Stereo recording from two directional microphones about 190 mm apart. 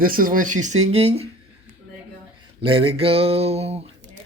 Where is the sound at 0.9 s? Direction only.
35° right (ahead or behind).